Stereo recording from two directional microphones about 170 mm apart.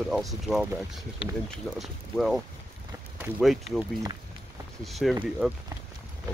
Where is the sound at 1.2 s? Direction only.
30° left (ahead or behind).